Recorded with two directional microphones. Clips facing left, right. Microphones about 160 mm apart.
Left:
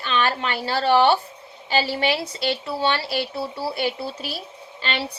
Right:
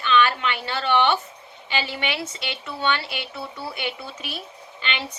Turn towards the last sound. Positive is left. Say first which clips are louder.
# left 3 dB
turn(degrees=35)  # may be behind; listen again after turning